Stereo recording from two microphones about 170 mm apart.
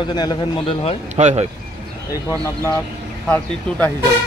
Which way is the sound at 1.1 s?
40° right (ahead or behind).